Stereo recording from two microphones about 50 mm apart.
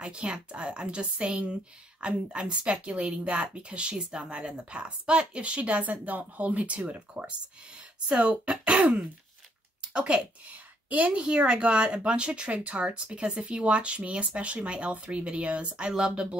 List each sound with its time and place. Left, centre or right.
0.0 s speech: right